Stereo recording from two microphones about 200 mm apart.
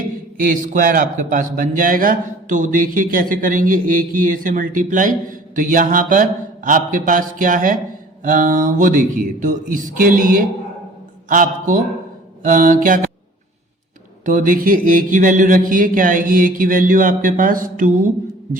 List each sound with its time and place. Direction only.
0.3 s a man's voice: 45° right (ahead or behind)
14.3 s a man's voice: 40° right (ahead or behind)